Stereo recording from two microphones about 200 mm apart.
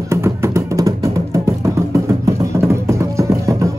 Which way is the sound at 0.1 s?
15° right (ahead or behind).